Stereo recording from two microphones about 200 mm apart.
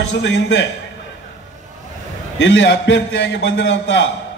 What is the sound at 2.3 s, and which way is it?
A man's voice, 65° left (ahead or behind).